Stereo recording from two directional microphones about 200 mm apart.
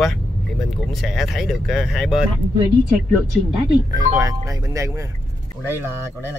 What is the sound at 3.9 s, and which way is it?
Speech, 15° right (ahead or behind).